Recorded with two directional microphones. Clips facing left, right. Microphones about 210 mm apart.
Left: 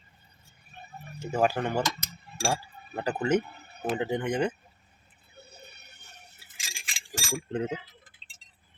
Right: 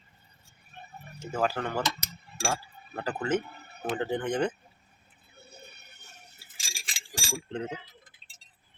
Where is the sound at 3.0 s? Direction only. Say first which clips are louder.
Left 3 dB; 15° left (ahead or behind).